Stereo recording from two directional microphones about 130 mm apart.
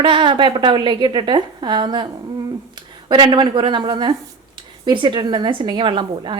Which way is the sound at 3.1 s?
35° right (ahead or behind).